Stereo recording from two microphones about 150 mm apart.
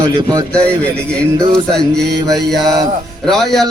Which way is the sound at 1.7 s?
5° left (ahead or behind).